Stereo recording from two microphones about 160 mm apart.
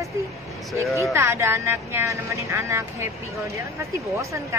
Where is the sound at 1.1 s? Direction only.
15° right (ahead or behind).